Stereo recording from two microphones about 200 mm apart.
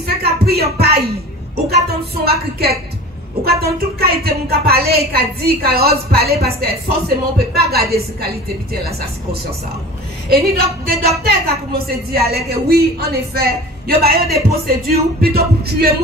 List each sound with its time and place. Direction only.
0.0 s a sound: 50° right (ahead or behind)
1.7 s a man's voice: 50° right (ahead or behind)
7.3 s a man's voice: 50° right (ahead or behind)
10.3 s a man's voice: 50° right (ahead or behind)